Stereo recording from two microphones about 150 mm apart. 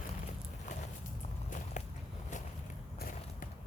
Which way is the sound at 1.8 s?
55° left (ahead or behind).